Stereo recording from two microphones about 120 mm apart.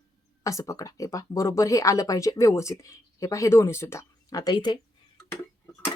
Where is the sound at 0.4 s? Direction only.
25° left (ahead or behind).